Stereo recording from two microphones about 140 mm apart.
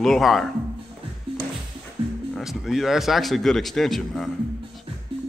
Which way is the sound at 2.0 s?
40° right (ahead or behind).